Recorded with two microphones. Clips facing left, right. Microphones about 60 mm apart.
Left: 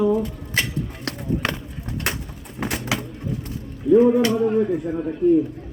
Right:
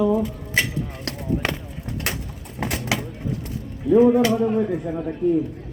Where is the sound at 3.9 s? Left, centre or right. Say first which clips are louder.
Even; centre.